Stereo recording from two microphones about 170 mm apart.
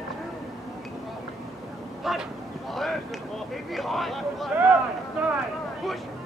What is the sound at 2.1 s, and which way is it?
Speech, centre (ahead or behind).